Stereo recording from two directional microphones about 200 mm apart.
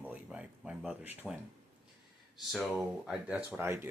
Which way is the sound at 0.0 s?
5° right (ahead or behind).